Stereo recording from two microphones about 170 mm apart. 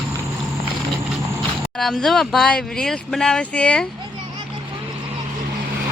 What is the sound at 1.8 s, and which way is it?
Speech, centre (ahead or behind).